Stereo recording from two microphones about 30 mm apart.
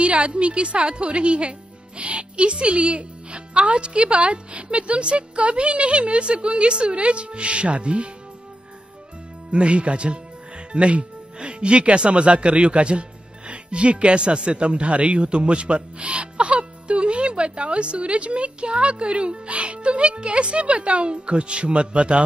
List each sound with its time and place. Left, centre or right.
0.0 s a man's voice: right
9.5 s a man's voice: right